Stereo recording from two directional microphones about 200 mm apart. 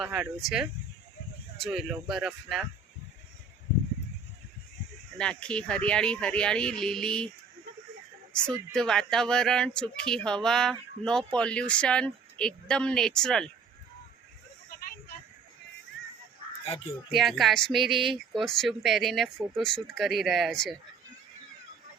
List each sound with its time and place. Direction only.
0.0 s speech: 5° right (ahead or behind)
1.6 s speech: centre (ahead or behind)
5.1 s speech: 5° left (ahead or behind)
8.7 s speech: 5° left (ahead or behind)
16.6 s speech: 30° left (ahead or behind)
17.1 s speech: centre (ahead or behind)